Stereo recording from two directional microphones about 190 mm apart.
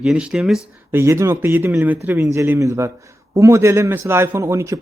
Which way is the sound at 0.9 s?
15° right (ahead or behind).